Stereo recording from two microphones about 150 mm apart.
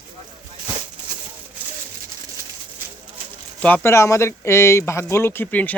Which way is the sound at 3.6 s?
15° left (ahead or behind).